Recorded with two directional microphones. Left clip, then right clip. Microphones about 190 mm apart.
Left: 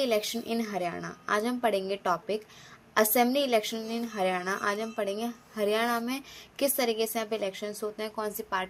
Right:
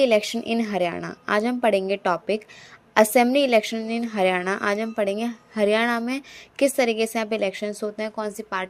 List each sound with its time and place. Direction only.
0.0 s a woman's voice: 35° right (ahead or behind)